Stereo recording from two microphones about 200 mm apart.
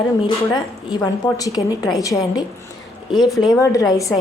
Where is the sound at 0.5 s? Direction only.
20° left (ahead or behind).